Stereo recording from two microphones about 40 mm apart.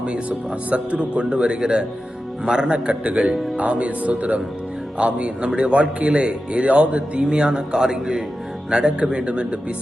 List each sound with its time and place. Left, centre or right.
0.0 s a man's voice: right